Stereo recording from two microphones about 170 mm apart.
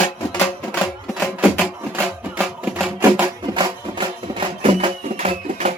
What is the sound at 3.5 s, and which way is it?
Music, 30° right (ahead or behind).